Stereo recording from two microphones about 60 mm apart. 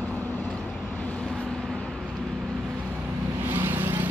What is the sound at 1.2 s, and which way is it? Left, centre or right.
Vehicle, centre.